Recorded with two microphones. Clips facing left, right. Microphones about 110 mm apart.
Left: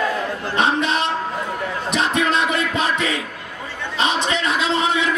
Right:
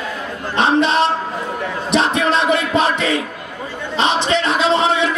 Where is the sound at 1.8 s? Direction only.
30° right (ahead or behind).